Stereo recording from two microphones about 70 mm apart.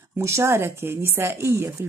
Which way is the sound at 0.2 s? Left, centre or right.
Right.